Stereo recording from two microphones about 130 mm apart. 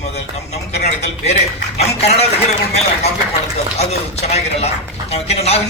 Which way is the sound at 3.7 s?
55° left (ahead or behind).